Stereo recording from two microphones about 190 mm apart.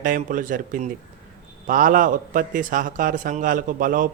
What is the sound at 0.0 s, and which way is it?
A man's voice, 45° right (ahead or behind).